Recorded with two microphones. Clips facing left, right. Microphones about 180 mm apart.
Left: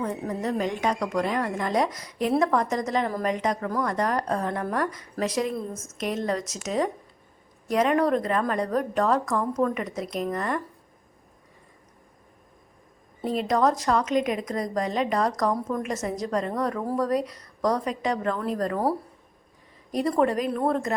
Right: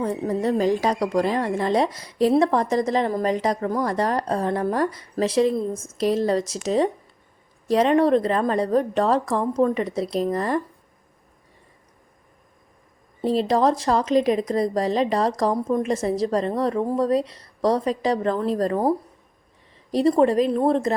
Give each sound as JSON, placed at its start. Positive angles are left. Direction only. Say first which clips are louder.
{"t": 0.0, "sound": "speech", "louder": "right 5 dB", "side_deg": -30}
{"t": 13.2, "sound": "a woman's voice", "louder": "right 4 dB", "side_deg": -30}